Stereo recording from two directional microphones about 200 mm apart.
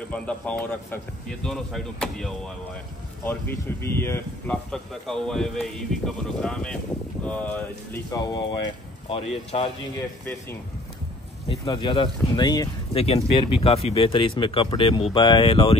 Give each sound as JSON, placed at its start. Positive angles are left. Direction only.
{"t": 0.1, "sound": "a man's voice", "side_deg": 5}
{"t": 9.1, "sound": "speech", "side_deg": 30}
{"t": 11.4, "sound": "speech", "side_deg": 25}